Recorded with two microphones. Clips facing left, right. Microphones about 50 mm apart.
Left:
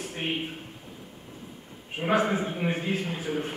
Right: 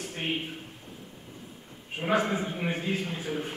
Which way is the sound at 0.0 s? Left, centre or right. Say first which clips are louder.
Left 1 dB; centre.